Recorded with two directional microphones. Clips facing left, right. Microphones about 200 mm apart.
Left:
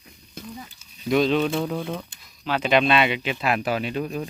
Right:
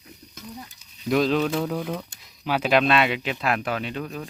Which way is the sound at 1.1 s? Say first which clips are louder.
Left 1 dB; centre (ahead or behind).